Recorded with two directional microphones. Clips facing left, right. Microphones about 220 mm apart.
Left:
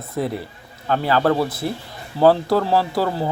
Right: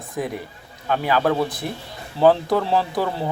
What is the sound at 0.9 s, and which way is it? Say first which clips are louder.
Speech: left 2 dB; 15° right (ahead or behind).